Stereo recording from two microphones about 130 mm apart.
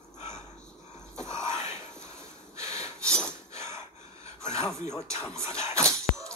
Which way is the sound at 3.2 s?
20° right (ahead or behind).